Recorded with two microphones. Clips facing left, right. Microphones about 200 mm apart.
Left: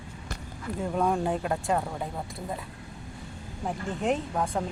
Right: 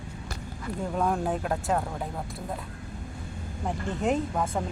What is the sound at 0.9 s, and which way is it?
Speech, centre (ahead or behind).